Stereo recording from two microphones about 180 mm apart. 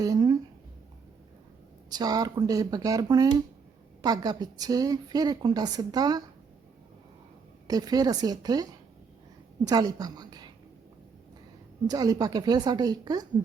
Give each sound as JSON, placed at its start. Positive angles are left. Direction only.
{"t": 0.0, "sound": "a sound", "side_deg": -20}
{"t": 1.9, "sound": "a woman's voice", "side_deg": -20}
{"t": 7.7, "sound": "a woman's voice", "side_deg": -20}
{"t": 9.6, "sound": "a woman's voice", "side_deg": -20}
{"t": 11.9, "sound": "a woman's voice", "side_deg": -20}